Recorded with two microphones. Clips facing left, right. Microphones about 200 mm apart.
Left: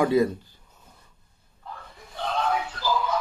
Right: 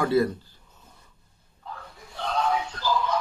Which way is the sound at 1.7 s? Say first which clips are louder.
Right 1 dB; centre (ahead or behind).